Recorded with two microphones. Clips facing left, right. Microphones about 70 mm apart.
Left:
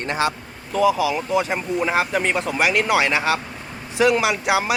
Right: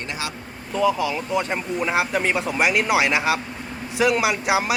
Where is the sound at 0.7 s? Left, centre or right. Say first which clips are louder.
Left 3 dB; centre.